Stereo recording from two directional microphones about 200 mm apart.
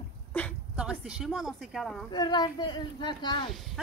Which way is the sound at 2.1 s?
20° left (ahead or behind).